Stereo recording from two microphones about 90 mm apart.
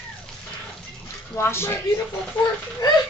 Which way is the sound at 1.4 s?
30° left (ahead or behind).